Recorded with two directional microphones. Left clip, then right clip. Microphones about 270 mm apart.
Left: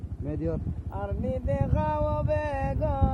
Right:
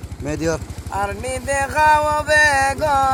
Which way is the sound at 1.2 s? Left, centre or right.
Centre.